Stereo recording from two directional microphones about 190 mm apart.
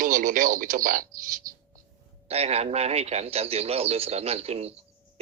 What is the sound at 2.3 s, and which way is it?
A man's voice, 35° right (ahead or behind).